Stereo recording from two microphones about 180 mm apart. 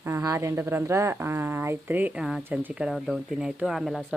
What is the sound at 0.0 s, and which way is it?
Speech, 15° right (ahead or behind).